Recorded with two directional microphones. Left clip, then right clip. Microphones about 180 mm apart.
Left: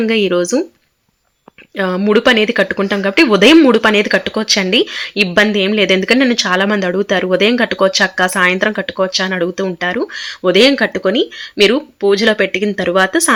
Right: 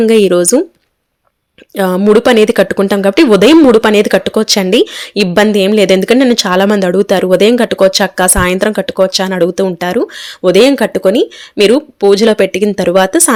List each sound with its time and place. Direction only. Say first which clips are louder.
0.0 s speech: right 6 dB; 55° right (ahead or behind)
1.7 s speech: right 5 dB; 50° right (ahead or behind)